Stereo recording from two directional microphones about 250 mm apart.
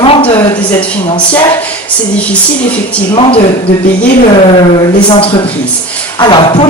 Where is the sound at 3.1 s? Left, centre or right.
Left.